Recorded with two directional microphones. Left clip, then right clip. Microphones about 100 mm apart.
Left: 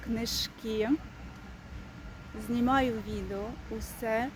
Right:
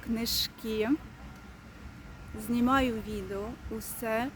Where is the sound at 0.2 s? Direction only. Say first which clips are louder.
Right 4 dB; 40° right (ahead or behind).